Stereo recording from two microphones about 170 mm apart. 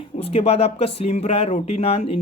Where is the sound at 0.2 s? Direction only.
35° left (ahead or behind).